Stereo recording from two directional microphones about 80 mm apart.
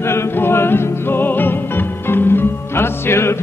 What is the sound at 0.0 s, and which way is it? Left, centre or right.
Music, left.